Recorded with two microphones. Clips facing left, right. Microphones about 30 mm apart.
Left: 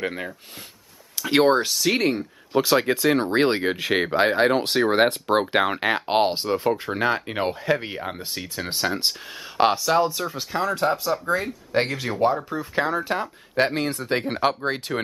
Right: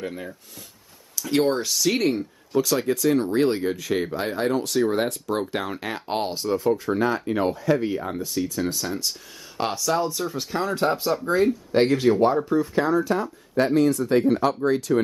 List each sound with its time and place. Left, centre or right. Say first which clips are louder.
0.0 s speech: left 4 dB; left
1.7 s speech: even; left
2.5 s speech: left 2 dB; left
9.6 s speech: left 5 dB; left
10.2 s speech: left 1 dB; centre
12.7 s speech: left 2 dB; left